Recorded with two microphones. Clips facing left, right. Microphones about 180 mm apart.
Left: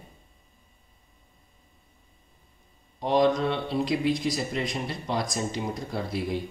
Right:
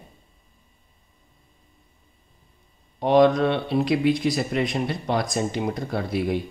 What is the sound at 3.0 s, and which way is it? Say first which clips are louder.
Speech: right 5 dB; 60° right (ahead or behind).